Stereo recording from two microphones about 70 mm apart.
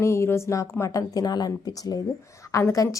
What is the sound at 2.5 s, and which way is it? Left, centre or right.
Speech, left.